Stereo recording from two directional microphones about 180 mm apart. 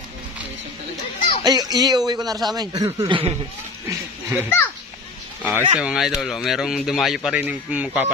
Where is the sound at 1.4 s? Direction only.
20° right (ahead or behind).